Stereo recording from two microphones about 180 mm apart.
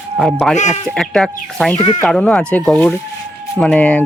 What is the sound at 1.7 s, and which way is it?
Speech, 40° left (ahead or behind).